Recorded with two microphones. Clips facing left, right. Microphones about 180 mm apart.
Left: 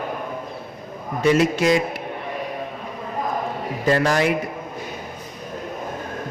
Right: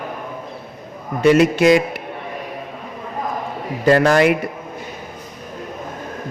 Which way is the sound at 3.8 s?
60° right (ahead or behind).